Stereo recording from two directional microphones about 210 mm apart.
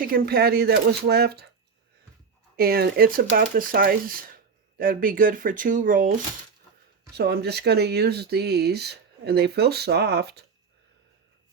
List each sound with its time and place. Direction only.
0.0 s speech: 45° right (ahead or behind)
2.6 s speech: 45° right (ahead or behind)
7.2 s speech: 50° right (ahead or behind)